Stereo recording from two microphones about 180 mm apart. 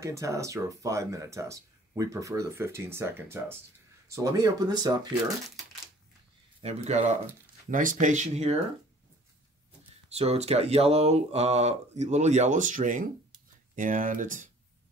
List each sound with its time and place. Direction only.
0.0 s speech: 15° right (ahead or behind)
6.6 s speech: 35° right (ahead or behind)
10.0 s speech: 35° right (ahead or behind)